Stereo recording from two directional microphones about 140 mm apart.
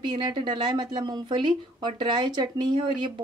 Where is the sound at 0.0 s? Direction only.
35° right (ahead or behind).